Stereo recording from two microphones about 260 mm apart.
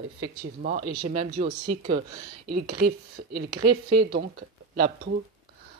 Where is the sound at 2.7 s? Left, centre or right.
Right.